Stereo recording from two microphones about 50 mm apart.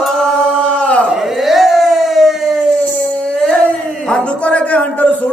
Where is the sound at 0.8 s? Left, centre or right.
Left.